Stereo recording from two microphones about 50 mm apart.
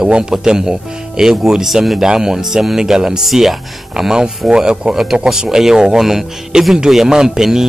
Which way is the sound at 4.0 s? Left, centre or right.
Centre.